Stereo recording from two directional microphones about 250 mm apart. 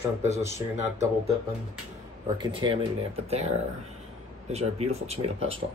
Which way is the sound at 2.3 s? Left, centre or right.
Centre.